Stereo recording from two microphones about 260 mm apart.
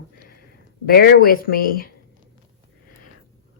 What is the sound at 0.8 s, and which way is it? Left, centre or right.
Speech, left.